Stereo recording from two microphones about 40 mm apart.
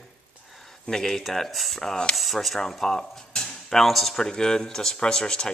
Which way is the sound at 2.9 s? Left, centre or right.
Centre.